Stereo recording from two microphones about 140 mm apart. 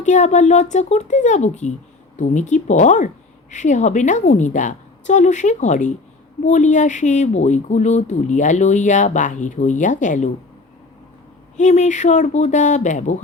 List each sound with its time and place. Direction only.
0.0 s speech: 60° left (ahead or behind)
11.5 s speech: 60° left (ahead or behind)